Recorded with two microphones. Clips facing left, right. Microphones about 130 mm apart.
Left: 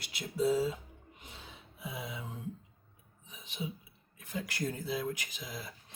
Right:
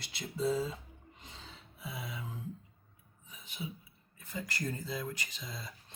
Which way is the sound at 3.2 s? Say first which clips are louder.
Left 2 dB; 20° left (ahead or behind).